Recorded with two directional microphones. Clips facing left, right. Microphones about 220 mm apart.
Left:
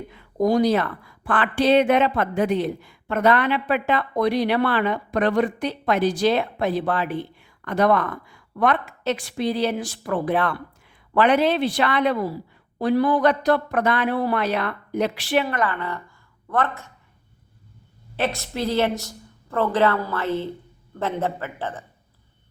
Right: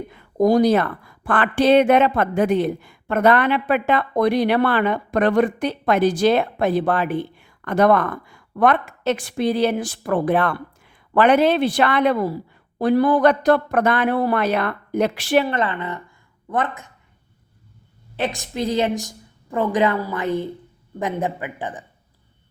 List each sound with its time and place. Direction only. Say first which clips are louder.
0.1 s speech: right 4 dB; 50° right (ahead or behind)
15.4 s a woman's voice: right 2 dB; 25° right (ahead or behind)
18.2 s a woman's voice: right 1 dB; 15° right (ahead or behind)